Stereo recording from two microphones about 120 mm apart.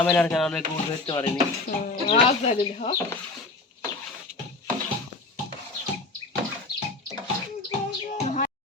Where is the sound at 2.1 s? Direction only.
60° left (ahead or behind).